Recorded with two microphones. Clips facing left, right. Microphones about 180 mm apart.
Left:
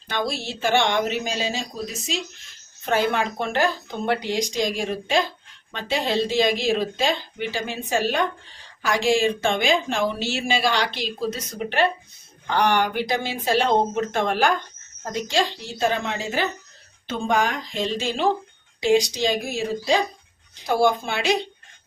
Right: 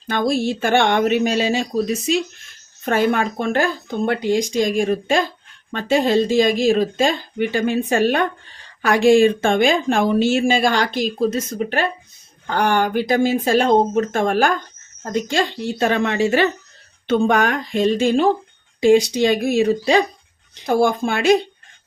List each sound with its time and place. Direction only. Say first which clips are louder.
0.1 s speech: right 8 dB; 50° right (ahead or behind); by 20.1 s 70° right (ahead or behind)
20.7 s speech: right 3 dB; 50° right (ahead or behind)